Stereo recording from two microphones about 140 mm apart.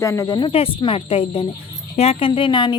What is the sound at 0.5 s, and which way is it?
A woman's voice, 40° left (ahead or behind).